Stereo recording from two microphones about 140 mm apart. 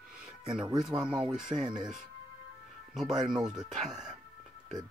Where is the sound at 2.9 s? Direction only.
5° right (ahead or behind).